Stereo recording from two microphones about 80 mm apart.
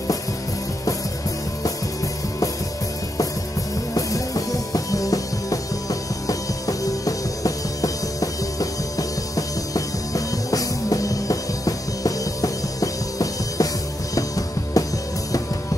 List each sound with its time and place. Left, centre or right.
3.9 s music: left